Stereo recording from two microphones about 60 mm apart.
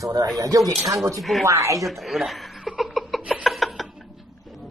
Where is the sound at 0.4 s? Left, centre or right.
Right.